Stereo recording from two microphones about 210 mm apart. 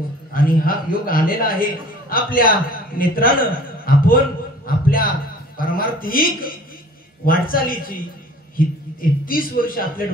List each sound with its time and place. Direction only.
0.3 s a man's voice: 45° left (ahead or behind)